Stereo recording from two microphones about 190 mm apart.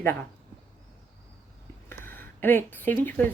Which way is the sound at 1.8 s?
10° left (ahead or behind).